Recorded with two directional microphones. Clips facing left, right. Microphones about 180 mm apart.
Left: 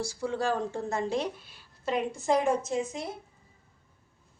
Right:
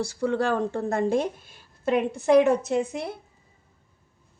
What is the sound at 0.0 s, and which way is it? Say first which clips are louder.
A woman's voice: right 5 dB; 60° right (ahead or behind).